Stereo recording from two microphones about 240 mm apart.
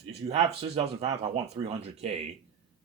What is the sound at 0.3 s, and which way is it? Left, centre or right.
Speech, right.